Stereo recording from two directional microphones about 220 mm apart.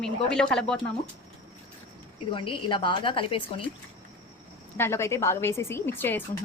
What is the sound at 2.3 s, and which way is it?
A woman's voice, 25° left (ahead or behind).